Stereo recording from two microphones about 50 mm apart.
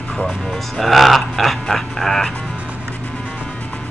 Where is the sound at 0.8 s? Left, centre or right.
Centre.